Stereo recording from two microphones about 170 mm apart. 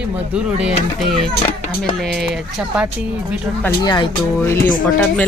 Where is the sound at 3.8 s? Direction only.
25° left (ahead or behind).